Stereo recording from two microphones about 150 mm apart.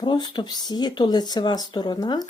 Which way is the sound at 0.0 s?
30° left (ahead or behind).